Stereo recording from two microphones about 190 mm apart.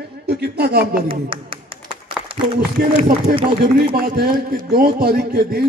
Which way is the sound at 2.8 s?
55° right (ahead or behind).